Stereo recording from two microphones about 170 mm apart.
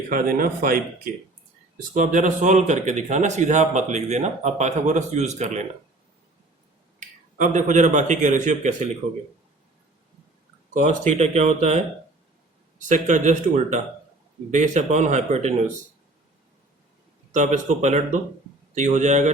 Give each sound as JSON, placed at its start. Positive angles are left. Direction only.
{"t": 0.1, "sound": "a man's voice", "side_deg": -55}
{"t": 7.0, "sound": "a man's voice", "side_deg": -50}
{"t": 10.8, "sound": "a man's voice", "side_deg": -45}
{"t": 12.9, "sound": "a man's voice", "side_deg": -45}
{"t": 17.3, "sound": "a man's voice", "side_deg": -45}